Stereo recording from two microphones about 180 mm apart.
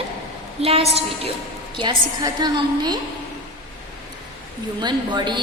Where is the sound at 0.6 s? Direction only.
35° right (ahead or behind).